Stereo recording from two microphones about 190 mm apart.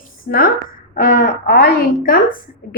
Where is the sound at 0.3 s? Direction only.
50° left (ahead or behind).